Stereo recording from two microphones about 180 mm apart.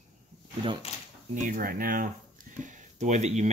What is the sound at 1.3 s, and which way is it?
Speech, 50° right (ahead or behind).